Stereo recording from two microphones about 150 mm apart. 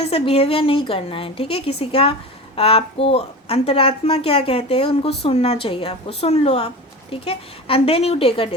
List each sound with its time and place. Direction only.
0.0 s a woman's voice: 40° left (ahead or behind)